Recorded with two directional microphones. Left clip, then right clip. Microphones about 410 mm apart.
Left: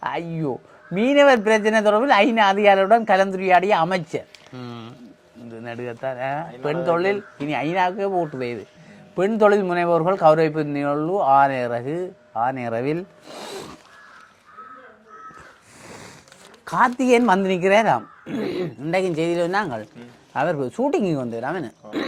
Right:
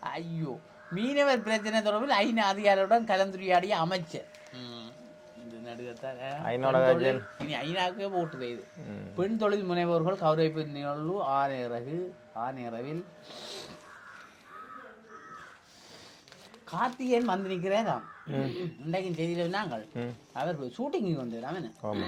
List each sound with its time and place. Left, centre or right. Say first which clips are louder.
0.0 s speech: left 11 dB; left
7.4 s speech: left 11 dB; left
16.6 s speech: left 12 dB; left